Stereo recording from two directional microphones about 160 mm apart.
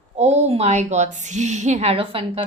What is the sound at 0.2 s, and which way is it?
A woman's voice, 40° right (ahead or behind).